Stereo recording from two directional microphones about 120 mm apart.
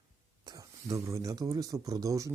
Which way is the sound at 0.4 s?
30° right (ahead or behind).